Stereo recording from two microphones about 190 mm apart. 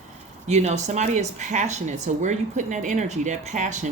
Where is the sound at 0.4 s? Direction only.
35° right (ahead or behind).